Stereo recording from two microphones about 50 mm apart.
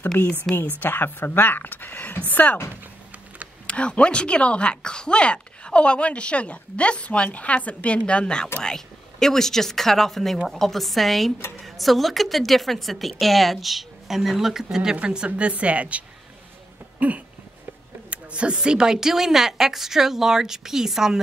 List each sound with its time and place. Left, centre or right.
0.2 s speech: left
3.6 s speech: left
8.7 s a woman's voice: centre
15.0 s a woman's voice: right
17.0 s cough: right
18.1 s a woman's voice: right